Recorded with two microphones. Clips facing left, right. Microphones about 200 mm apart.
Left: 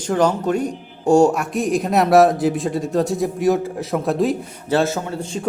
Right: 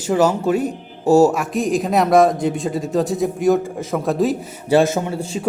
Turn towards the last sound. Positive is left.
turn(degrees=-10)  # may be behind; listen again after turning